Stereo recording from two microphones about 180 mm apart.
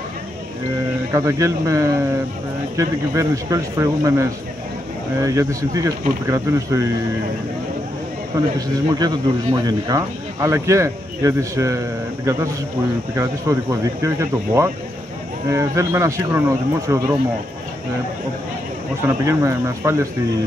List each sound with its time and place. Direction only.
1.1 s speech: 15° right (ahead or behind)
8.5 s speech: 20° right (ahead or behind)
19.0 s speech: 15° right (ahead or behind)